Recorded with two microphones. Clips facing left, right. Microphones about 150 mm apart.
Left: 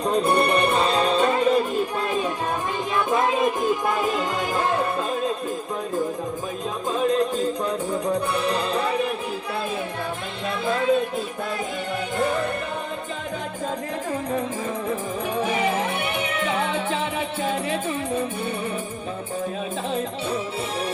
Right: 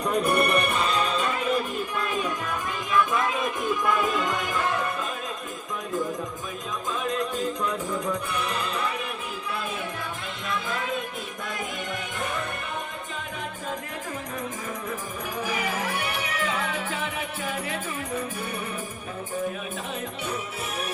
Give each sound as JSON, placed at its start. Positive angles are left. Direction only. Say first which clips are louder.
{"t": 0.0, "sound": "music", "louder": "left 3 dB", "side_deg": 30}
{"t": 6.9, "sound": "music", "louder": "left 7 dB", "side_deg": 30}
{"t": 10.5, "sound": "music", "louder": "left 6 dB", "side_deg": 35}
{"t": 12.1, "sound": "music", "louder": "left 10 dB", "side_deg": 35}
{"t": 15.4, "sound": "music", "louder": "left 4 dB", "side_deg": 25}